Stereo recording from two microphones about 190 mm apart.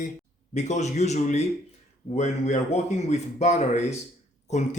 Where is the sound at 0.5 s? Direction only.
40° left (ahead or behind).